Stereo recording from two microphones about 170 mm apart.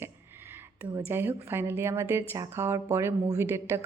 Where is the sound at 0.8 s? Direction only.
10° right (ahead or behind).